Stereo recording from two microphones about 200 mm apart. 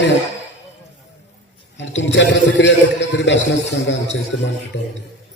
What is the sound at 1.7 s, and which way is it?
A man's voice, 65° left (ahead or behind).